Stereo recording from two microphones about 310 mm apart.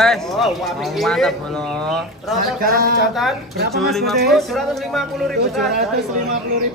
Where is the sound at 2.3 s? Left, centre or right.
Right.